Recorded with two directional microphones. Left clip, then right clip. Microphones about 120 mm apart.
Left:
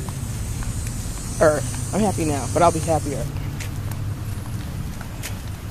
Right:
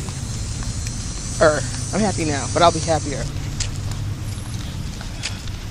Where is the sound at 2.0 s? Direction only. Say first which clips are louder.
Right 1 dB; 20° left (ahead or behind).